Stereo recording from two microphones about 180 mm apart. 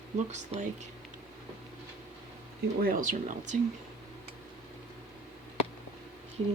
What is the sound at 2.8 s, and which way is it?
Speech, 50° right (ahead or behind).